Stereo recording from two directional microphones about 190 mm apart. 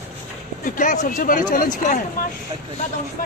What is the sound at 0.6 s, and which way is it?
Speech, 45° left (ahead or behind).